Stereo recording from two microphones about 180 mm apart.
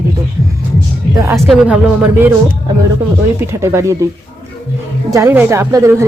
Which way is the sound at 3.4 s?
15° right (ahead or behind).